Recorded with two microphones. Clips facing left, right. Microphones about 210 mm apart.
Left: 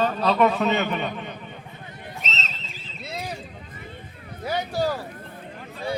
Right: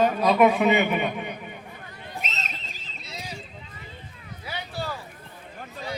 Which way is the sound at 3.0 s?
55° left (ahead or behind).